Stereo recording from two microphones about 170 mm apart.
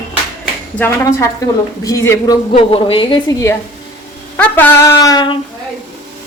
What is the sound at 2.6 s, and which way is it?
Speech, 30° left (ahead or behind).